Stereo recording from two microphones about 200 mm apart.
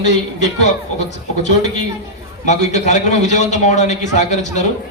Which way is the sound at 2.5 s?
35° left (ahead or behind).